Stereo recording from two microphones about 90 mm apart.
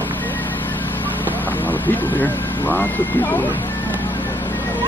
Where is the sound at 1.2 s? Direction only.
20° left (ahead or behind).